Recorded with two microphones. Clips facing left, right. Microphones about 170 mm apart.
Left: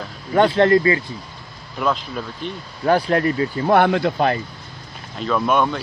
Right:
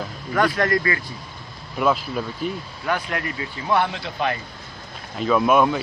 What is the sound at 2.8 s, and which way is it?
Speech, 35° left (ahead or behind).